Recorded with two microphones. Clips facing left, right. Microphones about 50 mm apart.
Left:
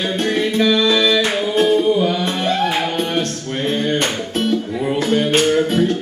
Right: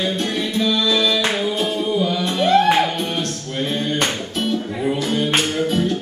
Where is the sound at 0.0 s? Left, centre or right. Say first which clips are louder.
Left 3 dB; left.